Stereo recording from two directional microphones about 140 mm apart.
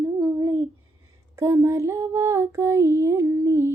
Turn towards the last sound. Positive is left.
turn(degrees=-20)  # may be behind; listen again after turning